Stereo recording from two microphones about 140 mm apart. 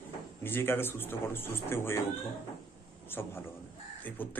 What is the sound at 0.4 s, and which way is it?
Speech, 15° left (ahead or behind).